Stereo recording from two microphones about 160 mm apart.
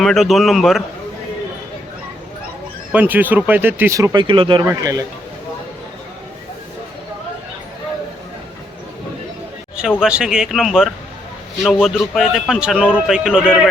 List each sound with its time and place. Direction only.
0.0 s a man's voice: centre (ahead or behind)
2.9 s speech: 10° right (ahead or behind); by 4.6 s 30° right (ahead or behind)
4.6 s speech: 20° right (ahead or behind)
10.0 s a man's voice: 5° right (ahead or behind)